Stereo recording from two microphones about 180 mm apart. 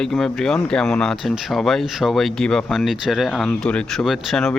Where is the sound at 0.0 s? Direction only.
Centre (ahead or behind).